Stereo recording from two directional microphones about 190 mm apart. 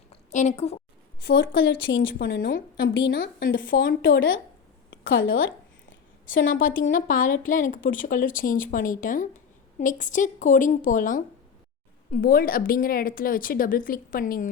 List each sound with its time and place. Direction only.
0.1 s a woman's voice: 35° left (ahead or behind)
1.2 s a woman's voice: 65° left (ahead or behind)
2.2 s a woman's voice: 70° left (ahead or behind)
6.4 s speech: 45° left (ahead or behind)